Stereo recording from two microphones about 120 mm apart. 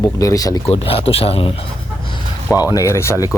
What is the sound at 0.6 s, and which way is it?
Speech, 55° left (ahead or behind).